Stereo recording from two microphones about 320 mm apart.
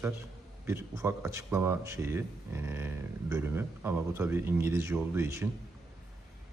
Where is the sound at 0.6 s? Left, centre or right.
Centre.